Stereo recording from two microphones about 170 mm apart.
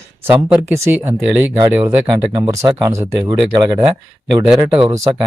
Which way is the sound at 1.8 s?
20° right (ahead or behind).